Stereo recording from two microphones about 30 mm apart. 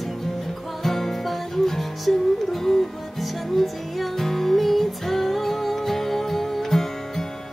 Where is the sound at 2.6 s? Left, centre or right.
Centre.